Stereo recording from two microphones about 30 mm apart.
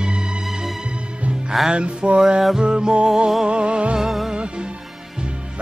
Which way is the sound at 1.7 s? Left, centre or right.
Right.